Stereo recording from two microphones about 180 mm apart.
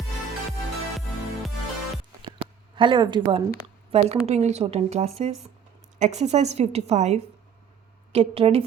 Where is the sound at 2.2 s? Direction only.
30° right (ahead or behind).